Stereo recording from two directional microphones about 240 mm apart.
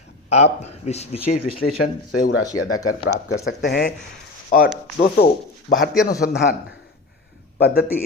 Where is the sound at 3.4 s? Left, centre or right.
Left.